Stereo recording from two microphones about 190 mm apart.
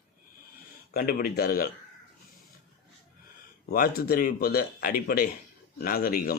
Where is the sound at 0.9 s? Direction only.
50° left (ahead or behind).